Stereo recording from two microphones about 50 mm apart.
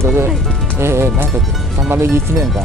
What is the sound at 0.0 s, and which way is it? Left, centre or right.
Speech, right.